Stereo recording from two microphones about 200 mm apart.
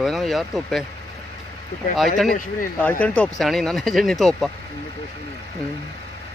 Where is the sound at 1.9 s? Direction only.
Centre (ahead or behind).